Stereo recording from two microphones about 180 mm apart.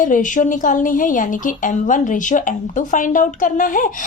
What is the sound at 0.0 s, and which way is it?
A woman's voice, 45° left (ahead or behind).